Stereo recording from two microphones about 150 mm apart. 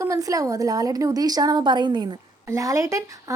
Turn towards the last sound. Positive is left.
turn(degrees=-20)  # may be behind; listen again after turning